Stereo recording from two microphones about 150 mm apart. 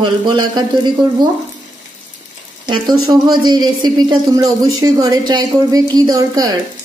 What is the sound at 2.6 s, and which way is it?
A woman's voice, 30° right (ahead or behind).